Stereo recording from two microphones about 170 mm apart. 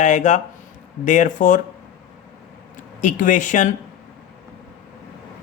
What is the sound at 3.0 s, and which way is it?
Speech, 50° left (ahead or behind).